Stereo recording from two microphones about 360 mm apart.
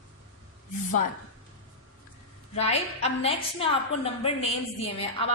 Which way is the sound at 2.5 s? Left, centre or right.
Centre.